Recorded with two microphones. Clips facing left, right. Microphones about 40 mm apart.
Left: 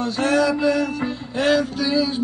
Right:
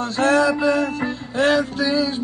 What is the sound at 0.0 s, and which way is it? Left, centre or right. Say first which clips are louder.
Male singing: right 2 dB; centre.